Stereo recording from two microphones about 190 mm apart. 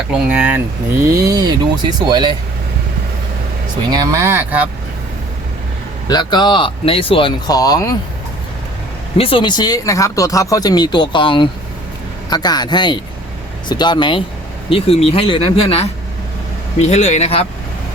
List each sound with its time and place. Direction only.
0.1 s speech: 5° right (ahead or behind); by 2.3 s 20° right (ahead or behind)
3.9 s speech: 15° right (ahead or behind)
6.1 s speech: 20° left (ahead or behind)
9.1 s speech: 30° left (ahead or behind)